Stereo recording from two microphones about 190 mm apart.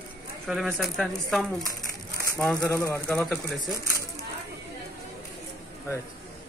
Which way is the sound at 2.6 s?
15° left (ahead or behind).